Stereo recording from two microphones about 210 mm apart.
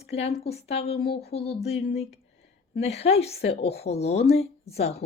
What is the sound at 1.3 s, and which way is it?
Speech, 30° left (ahead or behind).